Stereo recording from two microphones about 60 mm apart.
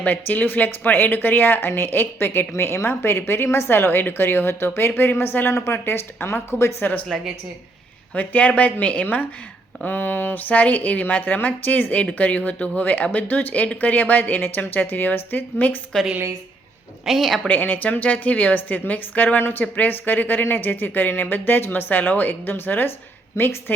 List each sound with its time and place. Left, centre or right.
0.0 s a woman's voice: left
7.1 s speech: centre
8.1 s a woman's voice: left
10.5 s a woman's voice: left
17.1 s a woman's voice: centre
17.5 s a woman's voice: left